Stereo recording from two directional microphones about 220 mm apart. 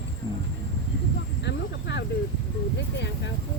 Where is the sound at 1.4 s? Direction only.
50° left (ahead or behind).